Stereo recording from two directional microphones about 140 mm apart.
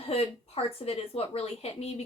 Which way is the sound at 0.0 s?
45° left (ahead or behind).